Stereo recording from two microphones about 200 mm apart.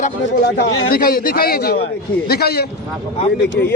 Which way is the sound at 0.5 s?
65° left (ahead or behind).